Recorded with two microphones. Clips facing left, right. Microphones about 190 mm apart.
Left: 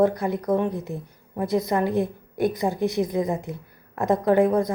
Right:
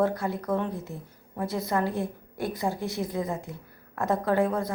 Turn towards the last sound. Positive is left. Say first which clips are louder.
# left 6 dB
turn(degrees=15)  # may be behind; listen again after turning